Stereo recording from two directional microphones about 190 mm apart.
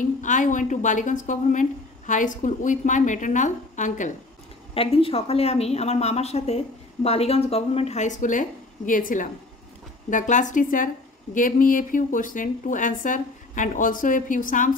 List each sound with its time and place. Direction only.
0.0 s a woman's voice: 40° left (ahead or behind)
4.7 s a woman's voice: 30° left (ahead or behind)